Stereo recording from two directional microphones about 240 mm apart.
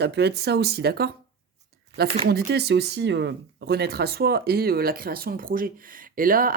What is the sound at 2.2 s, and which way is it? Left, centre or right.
Speech, right.